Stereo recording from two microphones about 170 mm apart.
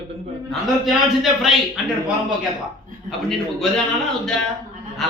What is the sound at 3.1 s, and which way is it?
Speech, centre (ahead or behind).